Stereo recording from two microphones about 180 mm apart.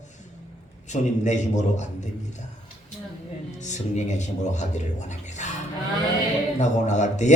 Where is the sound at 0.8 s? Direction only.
40° left (ahead or behind).